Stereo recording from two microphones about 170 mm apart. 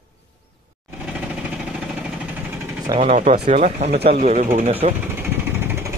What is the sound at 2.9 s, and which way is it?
Speech, 20° right (ahead or behind).